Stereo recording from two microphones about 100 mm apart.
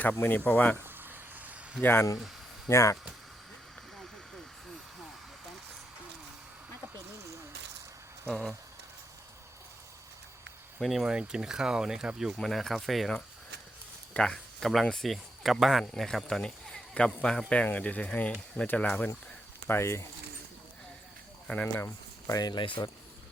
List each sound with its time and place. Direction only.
0.0 s speech: 15° left (ahead or behind)
0.8 s a sound: 20° right (ahead or behind)
1.8 s speech: 20° left (ahead or behind)
6.9 s a sound: 30° right (ahead or behind)
8.3 s speech: 5° left (ahead or behind)
10.8 s speech: centre (ahead or behind)
19.6 s speech: 25° left (ahead or behind)
21.4 s speech: 15° left (ahead or behind)
22.3 s speech: 40° left (ahead or behind)